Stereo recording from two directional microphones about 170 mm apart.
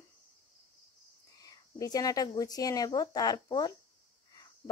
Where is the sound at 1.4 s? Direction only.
20° left (ahead or behind).